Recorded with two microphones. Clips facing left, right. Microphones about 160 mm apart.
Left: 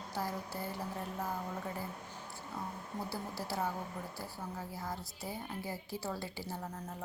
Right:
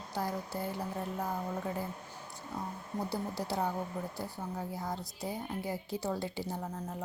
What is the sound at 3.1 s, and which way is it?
A woman's voice, 20° right (ahead or behind).